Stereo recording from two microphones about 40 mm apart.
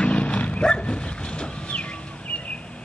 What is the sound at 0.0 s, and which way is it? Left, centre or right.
Vehicle, left.